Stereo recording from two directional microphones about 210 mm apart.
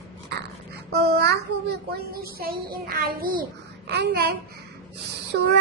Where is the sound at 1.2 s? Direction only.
50° right (ahead or behind).